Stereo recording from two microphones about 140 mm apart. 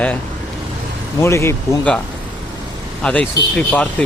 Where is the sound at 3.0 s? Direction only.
5° left (ahead or behind).